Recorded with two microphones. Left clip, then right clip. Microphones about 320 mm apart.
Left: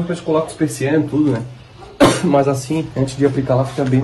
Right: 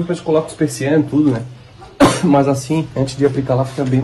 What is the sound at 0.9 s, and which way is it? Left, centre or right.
Speech, centre.